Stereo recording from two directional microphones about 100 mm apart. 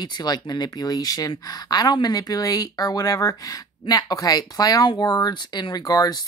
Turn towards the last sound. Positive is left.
turn(degrees=40)  # may be behind; listen again after turning